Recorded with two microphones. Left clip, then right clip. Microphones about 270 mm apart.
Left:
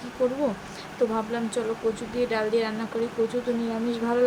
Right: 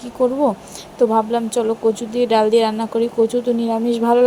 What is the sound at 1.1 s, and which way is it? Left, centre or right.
Speech, right.